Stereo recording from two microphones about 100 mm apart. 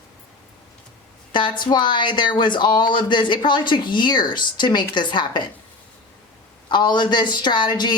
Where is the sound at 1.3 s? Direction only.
50° left (ahead or behind).